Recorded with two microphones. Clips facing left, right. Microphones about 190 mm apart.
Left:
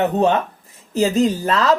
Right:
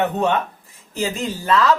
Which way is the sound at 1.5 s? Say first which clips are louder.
Right 1 dB; 35° left (ahead or behind).